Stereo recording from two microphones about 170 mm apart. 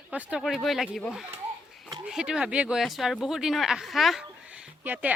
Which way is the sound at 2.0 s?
5° right (ahead or behind).